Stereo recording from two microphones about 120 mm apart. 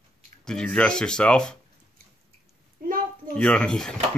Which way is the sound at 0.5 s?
10° left (ahead or behind).